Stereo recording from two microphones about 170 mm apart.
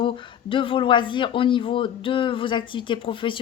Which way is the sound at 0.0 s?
30° left (ahead or behind).